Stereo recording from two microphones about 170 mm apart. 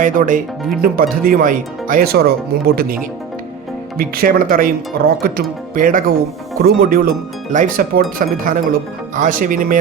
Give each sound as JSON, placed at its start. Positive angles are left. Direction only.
{"t": 0.0, "sound": "speech", "side_deg": -50}